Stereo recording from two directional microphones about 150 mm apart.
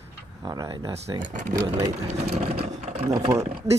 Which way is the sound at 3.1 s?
25° right (ahead or behind).